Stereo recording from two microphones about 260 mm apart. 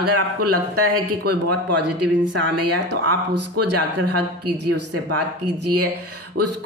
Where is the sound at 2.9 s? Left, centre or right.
Right.